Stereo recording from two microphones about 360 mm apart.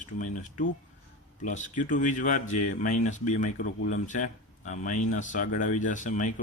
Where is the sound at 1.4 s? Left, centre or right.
Left.